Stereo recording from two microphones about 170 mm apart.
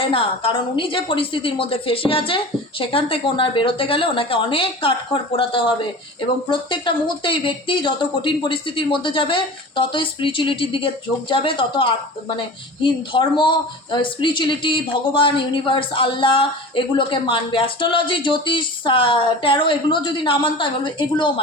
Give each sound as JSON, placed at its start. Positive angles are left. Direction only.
{"t": 0.0, "sound": "a woman's voice", "side_deg": 35}